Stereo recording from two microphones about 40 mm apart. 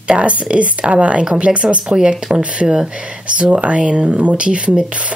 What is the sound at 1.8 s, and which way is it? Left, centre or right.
Speech, centre.